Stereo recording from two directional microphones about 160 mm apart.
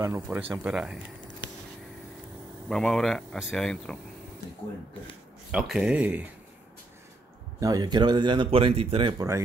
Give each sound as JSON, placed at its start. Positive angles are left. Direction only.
{"t": 0.0, "sound": "speech", "side_deg": -15}
{"t": 2.7, "sound": "speech", "side_deg": 0}
{"t": 5.5, "sound": "speech", "side_deg": -5}
{"t": 7.6, "sound": "speech", "side_deg": -25}